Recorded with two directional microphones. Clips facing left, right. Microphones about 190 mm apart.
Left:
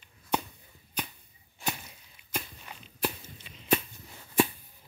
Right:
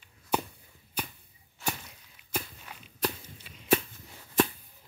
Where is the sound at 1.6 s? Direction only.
15° left (ahead or behind).